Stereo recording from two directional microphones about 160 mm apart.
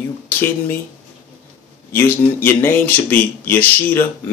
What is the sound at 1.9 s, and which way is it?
Speech, 10° left (ahead or behind).